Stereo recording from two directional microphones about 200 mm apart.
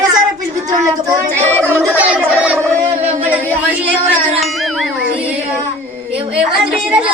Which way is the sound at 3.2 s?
10° right (ahead or behind).